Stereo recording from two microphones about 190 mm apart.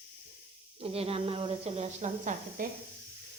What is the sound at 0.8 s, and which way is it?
A woman's voice, 30° right (ahead or behind).